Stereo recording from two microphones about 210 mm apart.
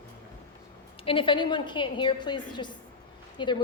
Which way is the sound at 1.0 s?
25° left (ahead or behind).